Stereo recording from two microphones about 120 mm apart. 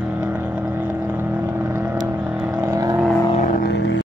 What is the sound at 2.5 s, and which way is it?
Vehicle, 25° right (ahead or behind).